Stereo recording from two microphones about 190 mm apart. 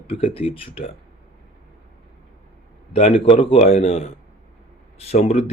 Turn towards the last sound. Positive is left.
turn(degrees=35)  # may be behind; listen again after turning